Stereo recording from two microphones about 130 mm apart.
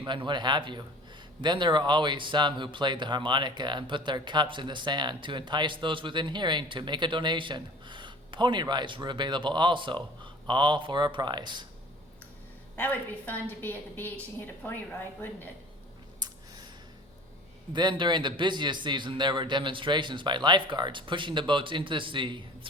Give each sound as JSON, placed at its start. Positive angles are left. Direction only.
{"t": 0.0, "sound": "speech", "side_deg": -35}
{"t": 12.7, "sound": "a woman's voice", "side_deg": 15}
{"t": 16.2, "sound": "a sound", "side_deg": -30}
{"t": 17.7, "sound": "speech", "side_deg": -35}